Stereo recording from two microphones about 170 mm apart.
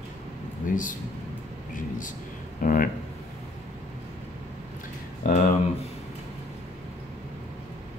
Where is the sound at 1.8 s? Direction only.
50° left (ahead or behind).